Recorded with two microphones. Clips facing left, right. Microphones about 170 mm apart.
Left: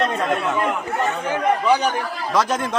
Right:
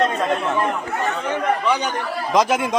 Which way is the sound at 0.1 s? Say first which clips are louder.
Even; centre (ahead or behind).